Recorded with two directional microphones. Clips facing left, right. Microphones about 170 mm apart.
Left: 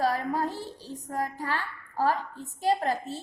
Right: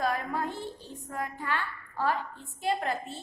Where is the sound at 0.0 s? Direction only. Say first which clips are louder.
Left 3 dB; 35° left (ahead or behind).